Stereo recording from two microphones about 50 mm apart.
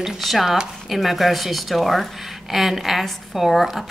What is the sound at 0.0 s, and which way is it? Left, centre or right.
A woman's voice, centre.